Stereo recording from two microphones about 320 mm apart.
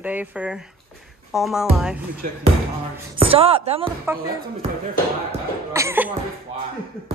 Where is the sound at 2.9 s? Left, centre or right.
Centre.